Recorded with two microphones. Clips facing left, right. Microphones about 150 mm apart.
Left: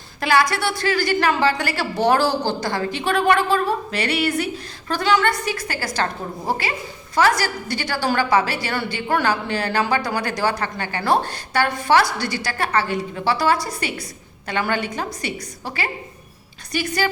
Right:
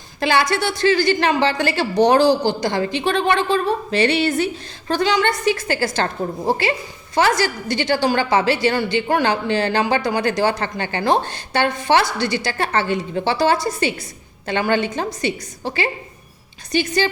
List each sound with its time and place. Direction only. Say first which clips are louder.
0.2 s a woman's voice: right 1 dB; 25° right (ahead or behind)
7.2 s a woman's voice: right 1 dB; 25° right (ahead or behind)